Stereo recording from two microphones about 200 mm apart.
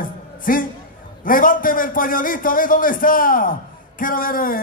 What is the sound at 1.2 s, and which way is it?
A man's voice, 45° left (ahead or behind).